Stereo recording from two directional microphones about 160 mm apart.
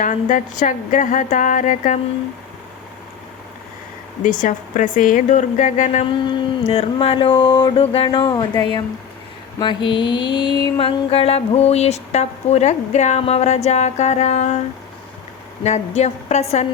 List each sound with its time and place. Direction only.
0.0 s mantra: 55° left (ahead or behind)
4.2 s mantra: 55° left (ahead or behind)
6.1 s a sound: 30° left (ahead or behind)
9.6 s mantra: 30° left (ahead or behind); by 14.6 s 45° left (ahead or behind)
15.6 s mantra: 45° left (ahead or behind)